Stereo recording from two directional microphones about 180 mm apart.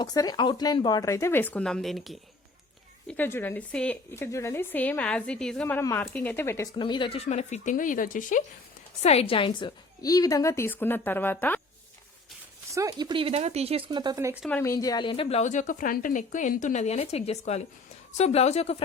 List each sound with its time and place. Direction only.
0.0 s speech: 20° left (ahead or behind); by 2.1 s centre (ahead or behind)
3.1 s speech: 10° left (ahead or behind)
6.7 s speech: 25° left (ahead or behind); by 8.4 s 45° left (ahead or behind)
9.0 s speech: 35° left (ahead or behind); by 11.6 s 10° left (ahead or behind)
12.7 s speech: 20° right (ahead or behind)
14.6 s a woman's voice: 15° left (ahead or behind); by 18.8 s 35° left (ahead or behind)